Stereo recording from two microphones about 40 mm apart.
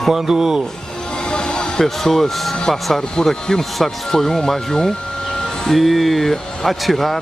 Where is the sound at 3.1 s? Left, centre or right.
Centre.